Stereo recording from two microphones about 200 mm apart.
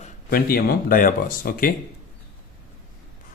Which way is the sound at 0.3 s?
50° left (ahead or behind).